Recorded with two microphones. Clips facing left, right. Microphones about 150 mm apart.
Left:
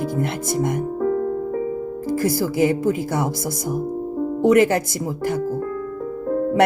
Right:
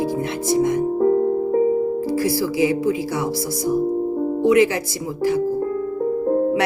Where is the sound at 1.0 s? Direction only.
30° right (ahead or behind).